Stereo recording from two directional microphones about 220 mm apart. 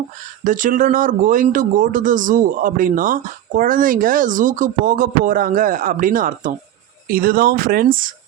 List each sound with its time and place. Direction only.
0.4 s speech: 35° right (ahead or behind)